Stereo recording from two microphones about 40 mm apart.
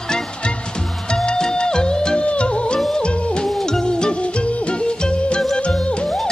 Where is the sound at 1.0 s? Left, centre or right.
Centre.